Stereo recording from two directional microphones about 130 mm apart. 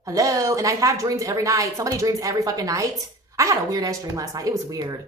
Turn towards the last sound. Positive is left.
turn(degrees=-30)  # may be behind; listen again after turning